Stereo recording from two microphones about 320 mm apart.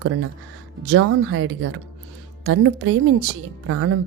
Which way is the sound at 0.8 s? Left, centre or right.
Right.